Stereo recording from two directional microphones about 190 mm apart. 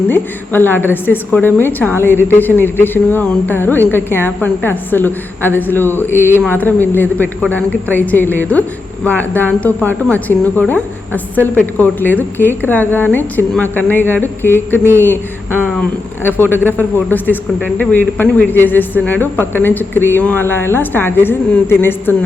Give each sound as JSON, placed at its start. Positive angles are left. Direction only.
{"t": 0.1, "sound": "a woman's voice", "side_deg": 10}
{"t": 16.2, "sound": "a woman's voice", "side_deg": 10}